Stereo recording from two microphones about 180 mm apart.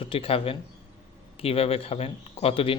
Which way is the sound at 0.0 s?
30° left (ahead or behind).